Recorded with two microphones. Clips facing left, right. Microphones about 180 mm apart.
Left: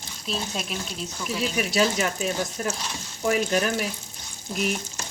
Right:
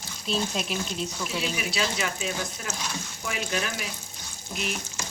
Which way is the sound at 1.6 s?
45° left (ahead or behind).